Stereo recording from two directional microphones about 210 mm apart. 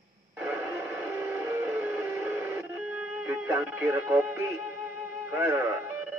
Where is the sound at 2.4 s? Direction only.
10° right (ahead or behind).